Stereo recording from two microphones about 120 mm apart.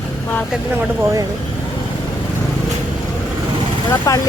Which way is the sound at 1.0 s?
30° right (ahead or behind).